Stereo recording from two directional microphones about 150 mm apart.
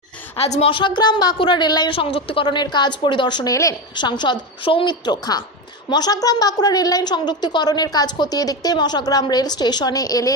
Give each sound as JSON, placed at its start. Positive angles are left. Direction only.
{"t": 0.3, "sound": "a woman's voice", "side_deg": 40}